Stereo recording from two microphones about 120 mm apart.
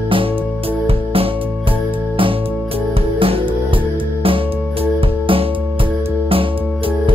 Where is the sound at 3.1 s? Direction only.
50° right (ahead or behind).